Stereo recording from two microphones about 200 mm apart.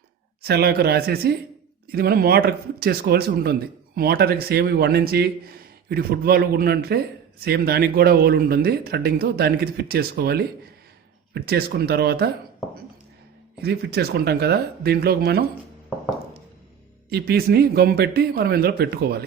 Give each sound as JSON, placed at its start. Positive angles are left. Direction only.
{"t": 0.4, "sound": "speech", "side_deg": -50}
{"t": 13.6, "sound": "speech", "side_deg": -55}
{"t": 17.1, "sound": "speech", "side_deg": -50}